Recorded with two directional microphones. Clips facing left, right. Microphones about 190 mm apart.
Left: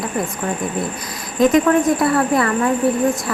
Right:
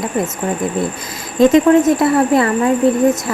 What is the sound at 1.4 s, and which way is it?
A woman's voice, 25° right (ahead or behind).